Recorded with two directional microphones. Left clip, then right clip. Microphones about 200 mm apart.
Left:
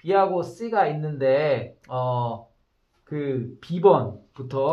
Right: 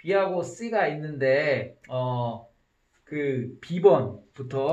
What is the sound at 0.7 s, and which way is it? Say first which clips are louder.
Speech: left 3 dB; 40° left (ahead or behind).